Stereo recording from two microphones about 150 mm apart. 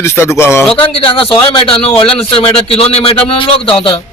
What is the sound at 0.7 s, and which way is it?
A man's voice, 35° left (ahead or behind).